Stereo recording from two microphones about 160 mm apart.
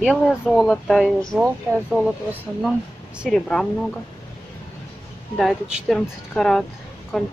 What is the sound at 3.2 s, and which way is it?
Speech, 5° left (ahead or behind).